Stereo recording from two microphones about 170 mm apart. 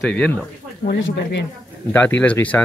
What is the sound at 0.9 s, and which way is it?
Speech, 80° left.